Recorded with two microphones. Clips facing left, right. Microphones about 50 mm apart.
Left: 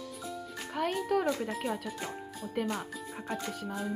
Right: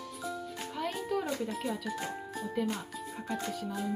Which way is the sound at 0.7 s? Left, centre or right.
Left.